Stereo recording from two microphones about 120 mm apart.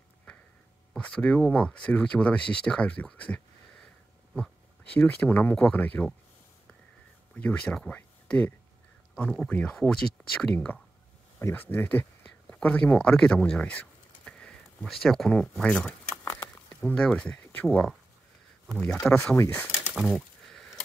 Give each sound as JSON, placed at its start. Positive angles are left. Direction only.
{"t": 0.9, "sound": "speech", "side_deg": 10}
{"t": 4.9, "sound": "speech", "side_deg": 10}
{"t": 7.3, "sound": "speech", "side_deg": 10}
{"t": 11.7, "sound": "a sound", "side_deg": 15}
{"t": 12.5, "sound": "speech", "side_deg": 10}
{"t": 16.6, "sound": "a sound", "side_deg": 10}
{"t": 17.6, "sound": "speech", "side_deg": 5}
{"t": 19.3, "sound": "speech", "side_deg": 20}
{"t": 19.9, "sound": "a sound", "side_deg": -5}